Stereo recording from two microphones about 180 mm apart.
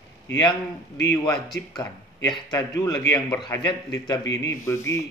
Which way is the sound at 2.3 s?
20° left (ahead or behind).